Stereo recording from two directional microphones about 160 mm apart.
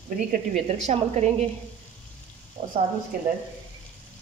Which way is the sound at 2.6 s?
55° right (ahead or behind).